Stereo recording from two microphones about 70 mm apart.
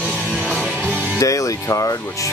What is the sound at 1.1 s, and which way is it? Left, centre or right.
Speech, left.